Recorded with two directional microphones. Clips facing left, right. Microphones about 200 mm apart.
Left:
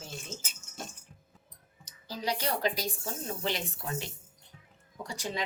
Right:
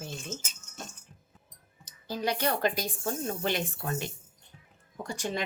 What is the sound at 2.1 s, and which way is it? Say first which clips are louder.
A woman's voice: right 3 dB; 55° right (ahead or behind).